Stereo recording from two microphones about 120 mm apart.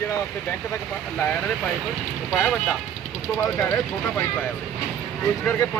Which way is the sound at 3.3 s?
25° left (ahead or behind).